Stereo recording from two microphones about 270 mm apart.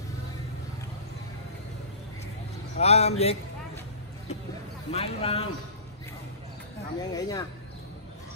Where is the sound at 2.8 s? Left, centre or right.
Left.